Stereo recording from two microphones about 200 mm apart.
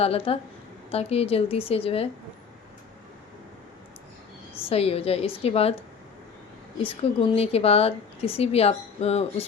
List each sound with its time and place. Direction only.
0.0 s a woman's voice: 30° left (ahead or behind)
4.6 s a woman's voice: 30° left (ahead or behind)
6.8 s a woman's voice: 30° left (ahead or behind)